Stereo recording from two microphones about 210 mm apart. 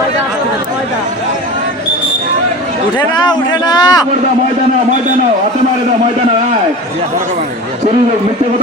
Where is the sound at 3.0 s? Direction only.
20° left (ahead or behind).